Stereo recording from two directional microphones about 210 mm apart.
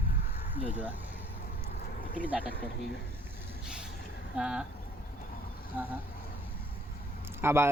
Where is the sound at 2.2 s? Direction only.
5° right (ahead or behind).